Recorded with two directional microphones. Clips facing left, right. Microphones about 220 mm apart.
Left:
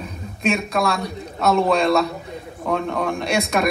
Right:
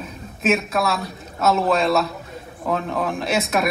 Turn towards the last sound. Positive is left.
turn(degrees=-5)  # may be behind; listen again after turning